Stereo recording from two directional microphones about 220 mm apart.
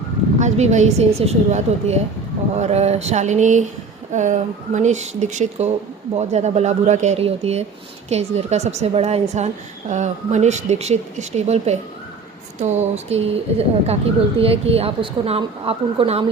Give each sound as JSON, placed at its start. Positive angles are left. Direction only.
{"t": 0.3, "sound": "speech", "side_deg": -30}